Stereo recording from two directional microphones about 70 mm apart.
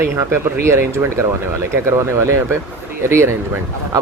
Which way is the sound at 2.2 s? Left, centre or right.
Right.